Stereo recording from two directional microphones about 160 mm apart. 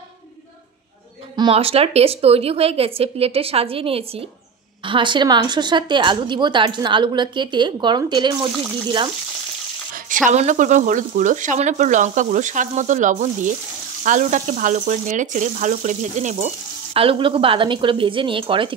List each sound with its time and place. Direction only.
1.3 s a woman's voice: 30° right (ahead or behind)
9.9 s speech: 55° right (ahead or behind)
16.9 s a woman's voice: 35° right (ahead or behind)